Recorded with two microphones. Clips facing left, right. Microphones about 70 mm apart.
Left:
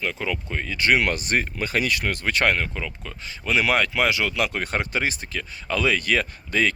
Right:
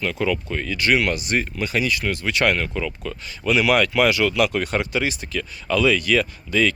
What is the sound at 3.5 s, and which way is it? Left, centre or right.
Speech, left.